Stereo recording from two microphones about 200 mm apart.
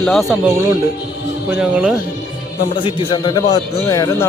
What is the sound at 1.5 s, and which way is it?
Speech, 5° right (ahead or behind).